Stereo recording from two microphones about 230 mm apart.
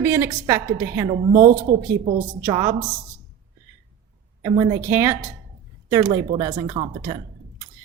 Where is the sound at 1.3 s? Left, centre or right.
Right.